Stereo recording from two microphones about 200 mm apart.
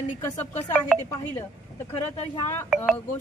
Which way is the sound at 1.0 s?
10° left (ahead or behind).